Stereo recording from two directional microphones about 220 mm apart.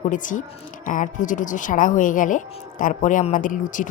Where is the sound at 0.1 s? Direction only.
35° left (ahead or behind).